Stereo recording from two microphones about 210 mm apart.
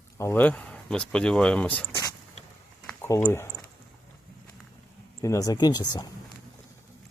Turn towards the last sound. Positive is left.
turn(degrees=20)  # may be behind; listen again after turning